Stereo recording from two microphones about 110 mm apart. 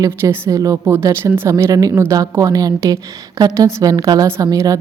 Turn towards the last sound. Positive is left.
turn(degrees=-35)  # may be behind; listen again after turning